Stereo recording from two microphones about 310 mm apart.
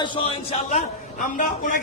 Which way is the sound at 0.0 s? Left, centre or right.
Centre.